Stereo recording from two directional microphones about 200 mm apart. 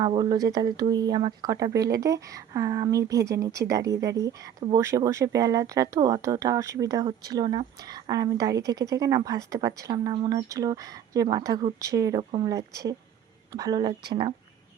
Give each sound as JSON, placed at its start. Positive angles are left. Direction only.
{"t": 0.0, "sound": "a woman's voice", "side_deg": -20}